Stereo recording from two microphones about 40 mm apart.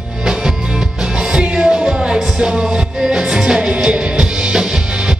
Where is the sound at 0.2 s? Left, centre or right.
Centre.